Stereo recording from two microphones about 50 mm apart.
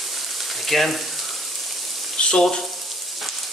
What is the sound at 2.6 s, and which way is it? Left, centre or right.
Frying, centre.